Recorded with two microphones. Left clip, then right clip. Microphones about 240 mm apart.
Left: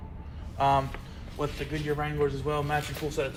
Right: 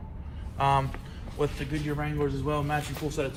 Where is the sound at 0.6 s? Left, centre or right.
Right.